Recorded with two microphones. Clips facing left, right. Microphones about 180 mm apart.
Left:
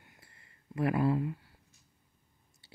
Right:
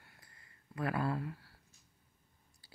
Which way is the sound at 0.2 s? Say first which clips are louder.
Left 2 dB; 25° left (ahead or behind).